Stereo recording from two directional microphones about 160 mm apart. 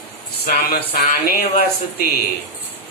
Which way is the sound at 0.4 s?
65° left (ahead or behind).